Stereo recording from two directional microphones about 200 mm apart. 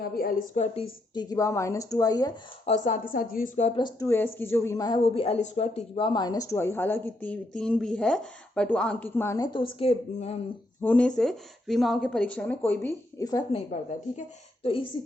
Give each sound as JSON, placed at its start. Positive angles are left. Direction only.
{"t": 0.0, "sound": "a woman's voice", "side_deg": 45}
{"t": 1.1, "sound": "speech", "side_deg": 20}
{"t": 2.6, "sound": "a woman's voice", "side_deg": 35}
{"t": 3.8, "sound": "speech", "side_deg": 15}
{"t": 5.1, "sound": "speech", "side_deg": 30}
{"t": 10.8, "sound": "speech", "side_deg": 5}
{"t": 14.6, "sound": "speech", "side_deg": 25}